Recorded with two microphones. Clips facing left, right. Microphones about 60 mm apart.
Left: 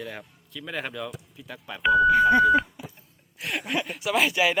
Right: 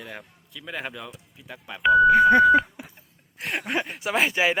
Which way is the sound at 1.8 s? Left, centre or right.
Centre.